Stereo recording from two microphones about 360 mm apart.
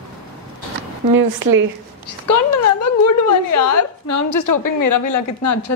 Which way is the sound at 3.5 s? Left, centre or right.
Left.